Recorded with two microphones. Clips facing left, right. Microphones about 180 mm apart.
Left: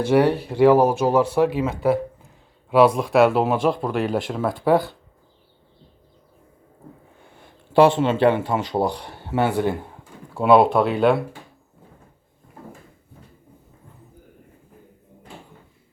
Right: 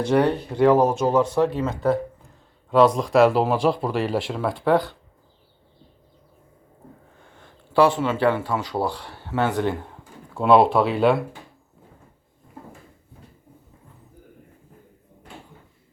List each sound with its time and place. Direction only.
0.0 s speech: 10° left (ahead or behind)
7.2 s a sound: 10° left (ahead or behind)
7.8 s speech: 25° left (ahead or behind); by 11.2 s centre (ahead or behind)